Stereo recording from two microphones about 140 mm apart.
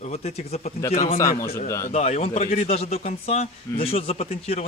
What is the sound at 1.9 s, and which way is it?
Speech, 50° left (ahead or behind).